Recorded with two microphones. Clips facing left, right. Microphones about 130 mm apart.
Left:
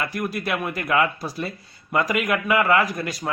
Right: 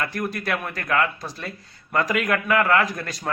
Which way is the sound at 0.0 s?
5° left (ahead or behind).